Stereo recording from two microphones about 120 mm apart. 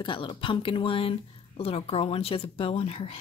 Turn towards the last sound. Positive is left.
turn(degrees=55)  # may be behind; listen again after turning